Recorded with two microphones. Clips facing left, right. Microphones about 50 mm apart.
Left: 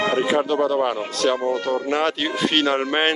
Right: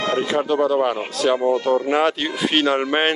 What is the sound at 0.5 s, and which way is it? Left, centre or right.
A man's voice, centre.